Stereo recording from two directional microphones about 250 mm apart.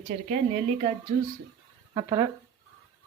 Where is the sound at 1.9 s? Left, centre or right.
Centre.